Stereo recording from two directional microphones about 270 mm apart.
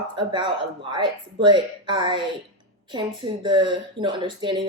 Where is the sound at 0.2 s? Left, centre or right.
Centre.